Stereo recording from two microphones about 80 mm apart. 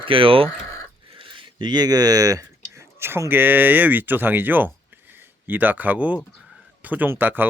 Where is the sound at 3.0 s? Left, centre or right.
Right.